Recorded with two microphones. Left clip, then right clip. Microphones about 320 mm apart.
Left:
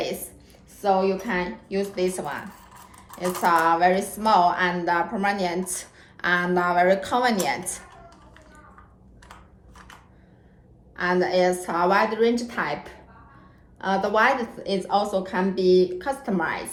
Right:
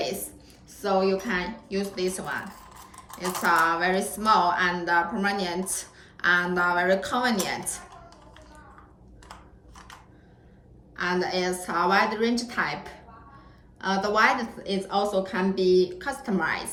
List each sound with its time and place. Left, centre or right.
0.8 s a woman's voice: centre
10.9 s a woman's voice: centre